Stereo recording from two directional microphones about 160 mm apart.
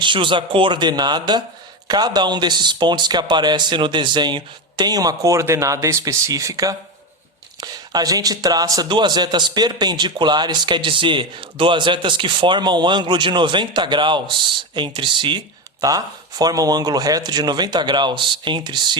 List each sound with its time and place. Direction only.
0.0 s speech: 30° right (ahead or behind)